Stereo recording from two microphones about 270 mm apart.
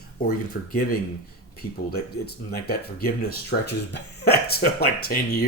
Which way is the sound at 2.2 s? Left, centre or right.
Left.